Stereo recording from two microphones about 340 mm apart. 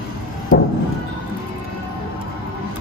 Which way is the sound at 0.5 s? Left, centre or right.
Left.